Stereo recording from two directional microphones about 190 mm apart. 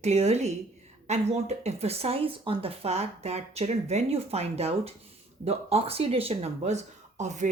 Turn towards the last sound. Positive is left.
turn(degrees=-40)  # may be behind; listen again after turning